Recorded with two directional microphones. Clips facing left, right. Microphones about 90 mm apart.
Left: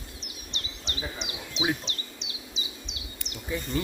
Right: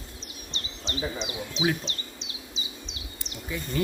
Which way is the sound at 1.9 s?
35° right (ahead or behind).